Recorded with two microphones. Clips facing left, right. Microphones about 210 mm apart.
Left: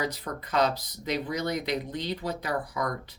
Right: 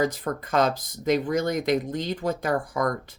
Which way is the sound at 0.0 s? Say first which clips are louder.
Right 7 dB; 50° right (ahead or behind).